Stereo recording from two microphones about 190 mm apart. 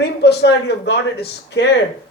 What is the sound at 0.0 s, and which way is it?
A man's voice, 60° left (ahead or behind).